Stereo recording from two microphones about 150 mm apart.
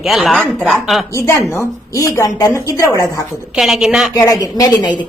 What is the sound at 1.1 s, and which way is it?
A woman's voice, 20° left (ahead or behind).